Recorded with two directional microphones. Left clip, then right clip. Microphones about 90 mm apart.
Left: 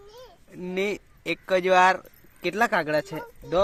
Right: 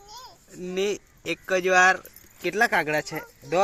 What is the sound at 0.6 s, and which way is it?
Speech, 40° left (ahead or behind).